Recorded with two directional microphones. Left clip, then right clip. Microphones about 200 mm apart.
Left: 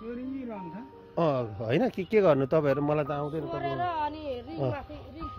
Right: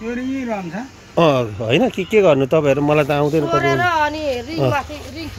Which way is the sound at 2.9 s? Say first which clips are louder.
Right 14 dB; centre (ahead or behind).